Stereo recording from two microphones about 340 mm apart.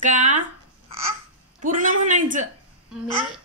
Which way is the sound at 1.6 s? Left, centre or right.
Right.